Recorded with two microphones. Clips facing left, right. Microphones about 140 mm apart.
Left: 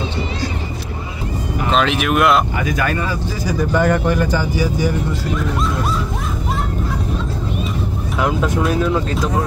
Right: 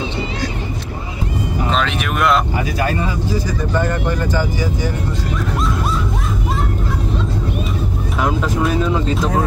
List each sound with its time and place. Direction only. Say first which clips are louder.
1.7 s speech: left 6 dB; 5° left (ahead or behind)
2.5 s speech: even; 30° right (ahead or behind)
8.2 s speech: even; centre (ahead or behind)